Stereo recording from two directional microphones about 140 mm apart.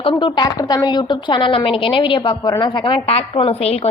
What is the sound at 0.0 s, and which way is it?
A woman's voice, 35° left (ahead or behind).